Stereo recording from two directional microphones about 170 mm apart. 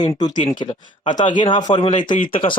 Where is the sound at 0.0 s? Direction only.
25° left (ahead or behind).